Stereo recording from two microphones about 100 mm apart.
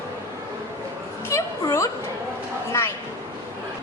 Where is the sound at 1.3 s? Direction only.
30° left (ahead or behind).